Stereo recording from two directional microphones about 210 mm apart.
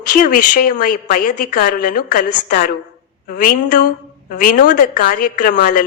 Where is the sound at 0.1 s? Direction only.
40° left (ahead or behind).